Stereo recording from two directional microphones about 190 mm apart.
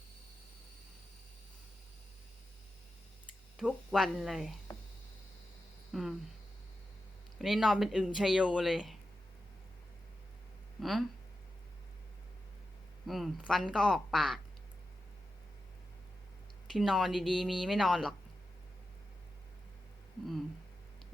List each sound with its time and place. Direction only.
3.6 s speech: centre (ahead or behind)
5.9 s speech: centre (ahead or behind)
7.3 s speech: centre (ahead or behind)
10.8 s speech: centre (ahead or behind)
13.1 s speech: centre (ahead or behind)
16.6 s speech: centre (ahead or behind)